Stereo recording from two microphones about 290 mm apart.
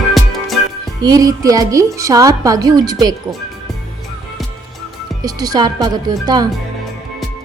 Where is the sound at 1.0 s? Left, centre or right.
Centre.